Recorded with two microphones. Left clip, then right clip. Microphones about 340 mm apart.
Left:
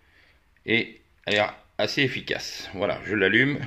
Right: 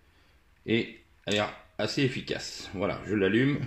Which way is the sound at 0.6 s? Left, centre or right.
Left.